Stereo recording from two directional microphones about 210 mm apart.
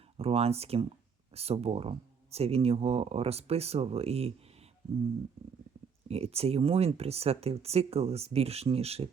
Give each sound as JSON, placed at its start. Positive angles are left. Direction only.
{"t": 0.2, "sound": "speech", "side_deg": -30}
{"t": 6.1, "sound": "speech", "side_deg": -30}